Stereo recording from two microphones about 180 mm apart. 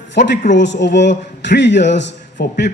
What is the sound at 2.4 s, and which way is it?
Speech, 65° left (ahead or behind).